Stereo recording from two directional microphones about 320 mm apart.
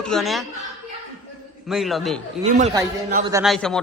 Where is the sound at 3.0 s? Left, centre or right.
Right.